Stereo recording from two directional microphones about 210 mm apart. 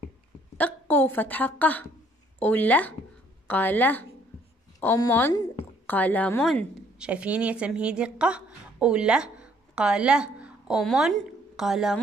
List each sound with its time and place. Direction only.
0.6 s a woman's voice: 10° left (ahead or behind)